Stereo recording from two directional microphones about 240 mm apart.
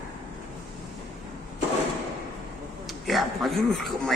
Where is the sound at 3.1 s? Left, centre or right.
Centre.